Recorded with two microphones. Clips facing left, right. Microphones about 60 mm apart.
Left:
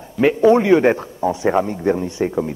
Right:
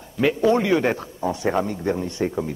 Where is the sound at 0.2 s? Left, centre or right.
Left.